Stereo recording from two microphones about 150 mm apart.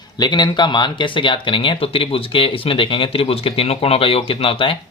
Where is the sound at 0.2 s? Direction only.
30° left (ahead or behind).